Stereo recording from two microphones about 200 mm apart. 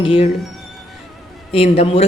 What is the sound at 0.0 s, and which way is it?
Speech, 30° left (ahead or behind).